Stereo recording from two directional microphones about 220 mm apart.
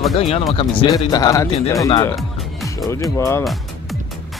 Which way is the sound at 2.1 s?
Centre (ahead or behind).